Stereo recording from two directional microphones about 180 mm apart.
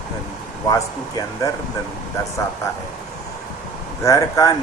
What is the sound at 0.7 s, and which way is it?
Speech, 20° left (ahead or behind).